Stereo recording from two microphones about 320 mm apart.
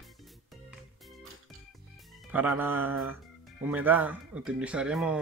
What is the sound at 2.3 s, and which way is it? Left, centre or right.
Speech, centre.